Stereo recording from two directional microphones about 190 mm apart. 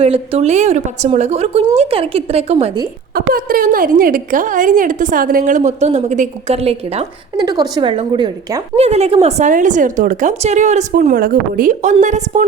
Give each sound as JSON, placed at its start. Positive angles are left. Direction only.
{"t": 0.0, "sound": "a woman's voice", "side_deg": -30}
{"t": 3.2, "sound": "a woman's voice", "side_deg": -50}
{"t": 7.4, "sound": "a woman's voice", "side_deg": -20}